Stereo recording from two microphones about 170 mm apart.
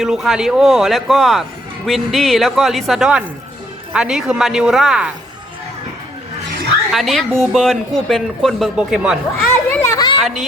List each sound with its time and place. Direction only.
0.0 s speech: 5° right (ahead or behind)
6.9 s speech: centre (ahead or behind)
9.6 s children playing: 20° left (ahead or behind)